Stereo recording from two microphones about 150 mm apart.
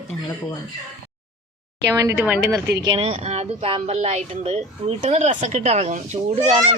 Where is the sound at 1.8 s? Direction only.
20° right (ahead or behind).